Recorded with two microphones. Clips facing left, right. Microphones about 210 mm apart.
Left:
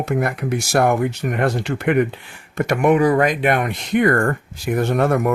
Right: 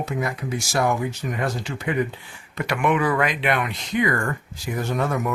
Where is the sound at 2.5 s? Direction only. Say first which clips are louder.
Left 6 dB; 45° left (ahead or behind).